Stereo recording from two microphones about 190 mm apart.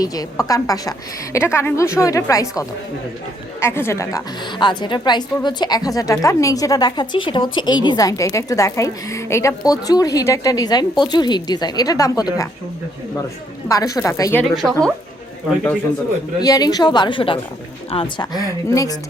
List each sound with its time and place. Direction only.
0.0 s a woman's voice: 20° left (ahead or behind)
13.7 s a woman's voice: 20° left (ahead or behind)
14.5 s speech: centre (ahead or behind)
16.4 s a woman's voice: 20° left (ahead or behind)